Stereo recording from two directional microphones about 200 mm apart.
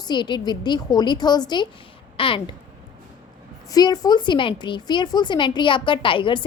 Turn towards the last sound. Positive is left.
turn(degrees=25)  # may be behind; listen again after turning